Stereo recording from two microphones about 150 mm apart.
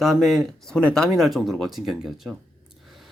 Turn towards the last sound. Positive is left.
turn(degrees=0)  # may be behind; listen again after turning